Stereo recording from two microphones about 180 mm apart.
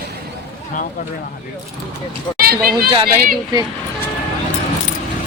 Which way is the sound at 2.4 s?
55° right (ahead or behind).